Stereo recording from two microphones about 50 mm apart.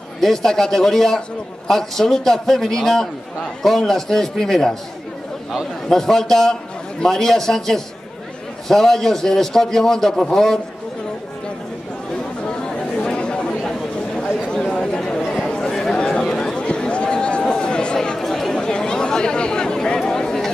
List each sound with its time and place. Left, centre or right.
0.2 s a man's voice: centre
5.9 s a man's voice: centre
12.4 s chatter: centre
14.5 s a sound: centre